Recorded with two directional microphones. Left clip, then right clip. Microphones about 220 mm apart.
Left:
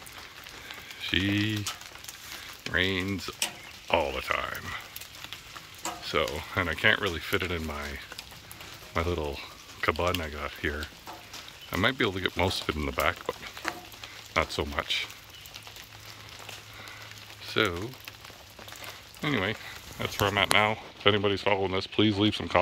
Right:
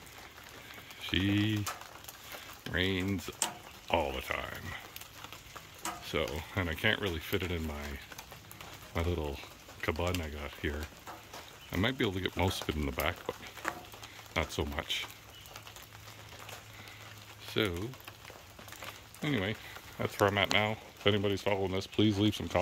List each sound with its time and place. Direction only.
1.1 s speech: 10° right (ahead or behind)
2.7 s speech: 10° right (ahead or behind)
6.0 s speech: 10° right (ahead or behind)
17.6 s speech: 10° right (ahead or behind)
19.2 s speech: 10° right (ahead or behind)